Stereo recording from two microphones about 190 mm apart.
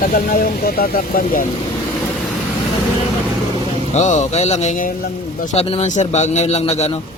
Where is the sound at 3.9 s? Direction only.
40° left (ahead or behind).